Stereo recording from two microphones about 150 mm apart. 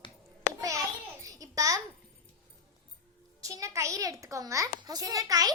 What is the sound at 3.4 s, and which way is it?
A child's voice, 20° right (ahead or behind).